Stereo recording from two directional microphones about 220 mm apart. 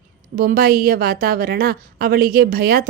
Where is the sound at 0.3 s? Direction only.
40° right (ahead or behind).